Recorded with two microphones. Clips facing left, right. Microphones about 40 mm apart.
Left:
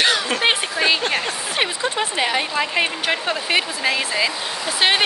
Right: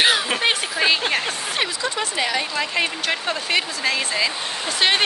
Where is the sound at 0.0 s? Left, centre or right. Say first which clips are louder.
Even; centre.